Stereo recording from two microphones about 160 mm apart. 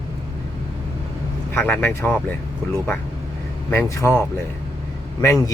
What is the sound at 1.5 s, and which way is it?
Speech, 10° left (ahead or behind).